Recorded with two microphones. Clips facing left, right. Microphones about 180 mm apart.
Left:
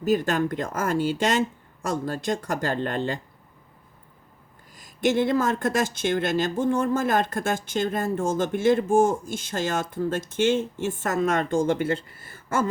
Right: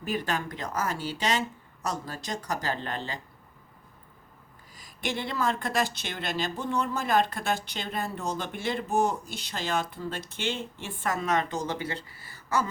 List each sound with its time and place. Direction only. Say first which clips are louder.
0.0 s speech: left 8 dB; 45° left (ahead or behind)
4.7 s speech: left 10 dB; 50° left (ahead or behind)